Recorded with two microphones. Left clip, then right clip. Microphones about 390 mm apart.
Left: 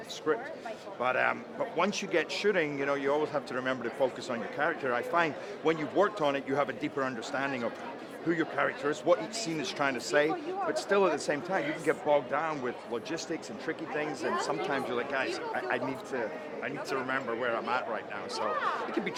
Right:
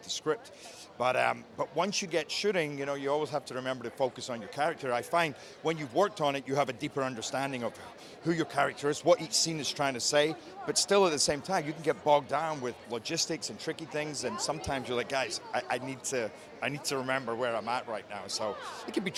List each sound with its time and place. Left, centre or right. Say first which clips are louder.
0.3 s a man's voice: left 4 dB; right
16.1 s a man's voice: even; right
19.0 s a man's voice: left 1 dB; right